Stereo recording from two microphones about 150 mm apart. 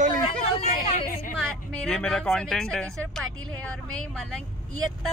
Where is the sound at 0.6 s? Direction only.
60° left (ahead or behind).